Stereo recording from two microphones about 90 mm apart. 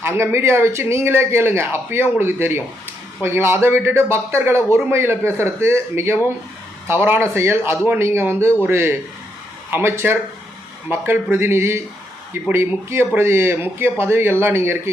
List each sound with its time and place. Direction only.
0.0 s a man's voice: 25° right (ahead or behind)